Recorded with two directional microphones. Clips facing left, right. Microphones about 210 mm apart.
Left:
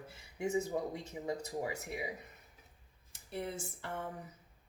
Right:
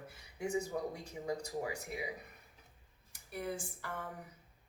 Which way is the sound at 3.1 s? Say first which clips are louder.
Even; 25° left (ahead or behind).